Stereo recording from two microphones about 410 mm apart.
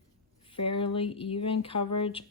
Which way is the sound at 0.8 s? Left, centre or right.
Centre.